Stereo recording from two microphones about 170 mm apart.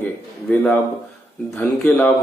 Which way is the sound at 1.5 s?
5° left (ahead or behind).